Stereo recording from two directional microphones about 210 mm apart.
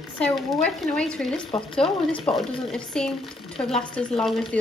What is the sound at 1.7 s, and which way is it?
Speech, centre (ahead or behind).